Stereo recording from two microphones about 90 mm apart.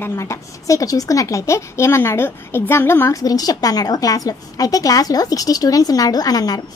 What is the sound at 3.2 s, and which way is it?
A woman's voice, 45° left (ahead or behind).